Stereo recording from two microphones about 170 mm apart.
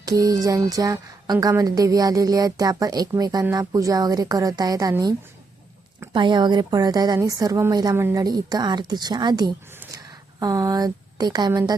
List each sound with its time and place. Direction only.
0.0 s speech: 20° right (ahead or behind)
6.1 s a woman's voice: 25° right (ahead or behind)